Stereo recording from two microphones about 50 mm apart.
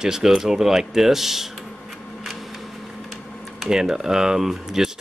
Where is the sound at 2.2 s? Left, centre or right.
Centre.